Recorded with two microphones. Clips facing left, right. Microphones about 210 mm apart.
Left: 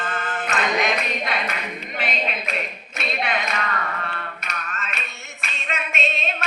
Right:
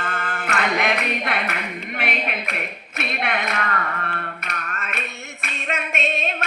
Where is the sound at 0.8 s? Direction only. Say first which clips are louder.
Right 1 dB; 65° right (ahead or behind).